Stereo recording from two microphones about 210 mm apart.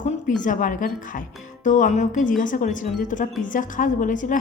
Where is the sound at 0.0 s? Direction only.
40° left (ahead or behind).